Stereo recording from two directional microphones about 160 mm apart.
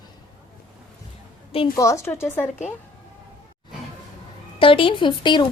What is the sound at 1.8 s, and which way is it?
Speech, 20° left (ahead or behind).